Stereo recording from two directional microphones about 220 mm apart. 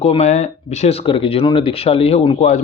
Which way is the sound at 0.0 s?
30° left (ahead or behind).